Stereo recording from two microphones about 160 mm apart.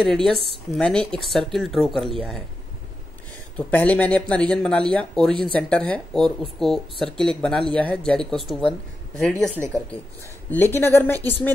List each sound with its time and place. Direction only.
0.0 s speech: 5° left (ahead or behind)
3.5 s speech: 10° left (ahead or behind)
10.5 s speech: 15° left (ahead or behind)